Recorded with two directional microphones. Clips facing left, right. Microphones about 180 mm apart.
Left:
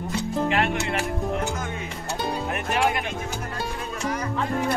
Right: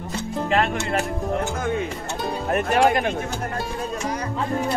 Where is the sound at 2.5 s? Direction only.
40° right (ahead or behind).